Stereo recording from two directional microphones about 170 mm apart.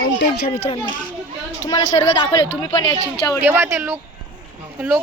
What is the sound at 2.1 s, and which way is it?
Speech, 25° left (ahead or behind).